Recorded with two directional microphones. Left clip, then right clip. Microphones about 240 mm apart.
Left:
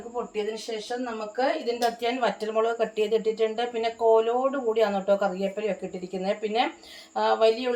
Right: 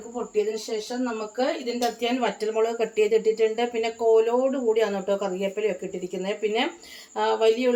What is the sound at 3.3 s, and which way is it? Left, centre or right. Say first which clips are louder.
Speech: right 3 dB; centre.